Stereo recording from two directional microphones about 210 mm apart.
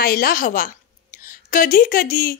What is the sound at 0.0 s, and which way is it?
A woman's voice, 45° left (ahead or behind).